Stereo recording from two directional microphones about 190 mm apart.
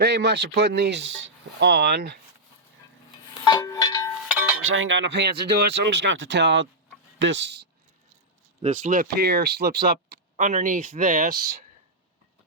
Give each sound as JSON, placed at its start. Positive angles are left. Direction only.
{"t": 0.0, "sound": "speech", "side_deg": -60}
{"t": 3.4, "sound": "music", "side_deg": 20}
{"t": 4.6, "sound": "speech", "side_deg": -90}
{"t": 8.6, "sound": "speech", "side_deg": -40}